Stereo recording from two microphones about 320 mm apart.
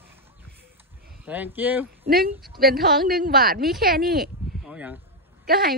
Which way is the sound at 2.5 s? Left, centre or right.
Right.